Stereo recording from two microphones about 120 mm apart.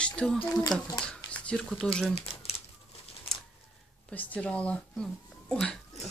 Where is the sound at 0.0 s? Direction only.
10° left (ahead or behind).